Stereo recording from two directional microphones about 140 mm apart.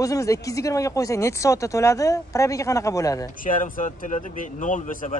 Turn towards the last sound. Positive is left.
turn(degrees=70)  # may be behind; listen again after turning